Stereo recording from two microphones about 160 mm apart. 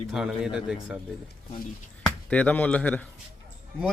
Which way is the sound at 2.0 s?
10° left (ahead or behind).